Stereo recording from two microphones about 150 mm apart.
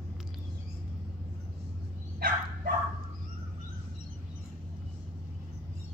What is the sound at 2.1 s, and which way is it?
Bow-wow, 90° right.